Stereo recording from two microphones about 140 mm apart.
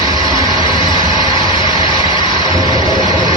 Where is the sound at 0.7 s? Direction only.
35° left (ahead or behind).